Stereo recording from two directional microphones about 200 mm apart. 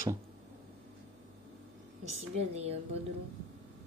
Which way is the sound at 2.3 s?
30° right (ahead or behind).